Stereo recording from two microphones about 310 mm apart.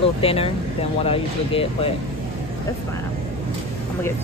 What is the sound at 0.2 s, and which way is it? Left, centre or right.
Speech, centre.